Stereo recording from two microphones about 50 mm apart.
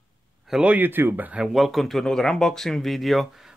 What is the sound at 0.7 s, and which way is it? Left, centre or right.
Speech, right.